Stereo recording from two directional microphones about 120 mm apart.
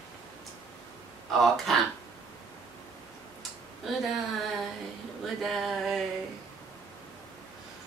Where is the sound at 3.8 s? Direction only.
Centre (ahead or behind).